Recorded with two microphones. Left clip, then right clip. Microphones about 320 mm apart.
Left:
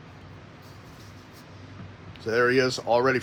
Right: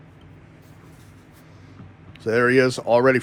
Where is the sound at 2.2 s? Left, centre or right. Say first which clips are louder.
Right 4 dB; right.